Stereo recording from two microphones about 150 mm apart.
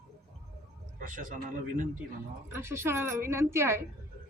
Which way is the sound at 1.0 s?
60° right (ahead or behind).